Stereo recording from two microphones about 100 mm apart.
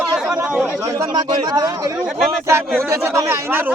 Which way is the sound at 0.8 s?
30° right (ahead or behind).